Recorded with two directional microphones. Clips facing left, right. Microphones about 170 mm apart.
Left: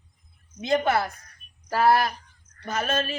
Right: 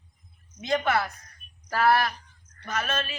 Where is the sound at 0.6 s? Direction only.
30° left (ahead or behind).